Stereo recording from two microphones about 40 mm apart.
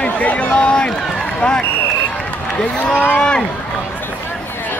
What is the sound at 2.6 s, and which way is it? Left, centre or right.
Speech, left.